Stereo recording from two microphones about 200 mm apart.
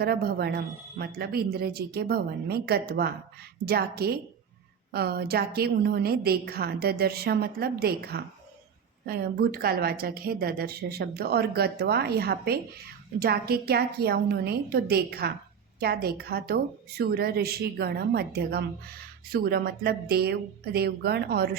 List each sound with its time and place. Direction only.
0.0 s a woman's voice: 50° right (ahead or behind)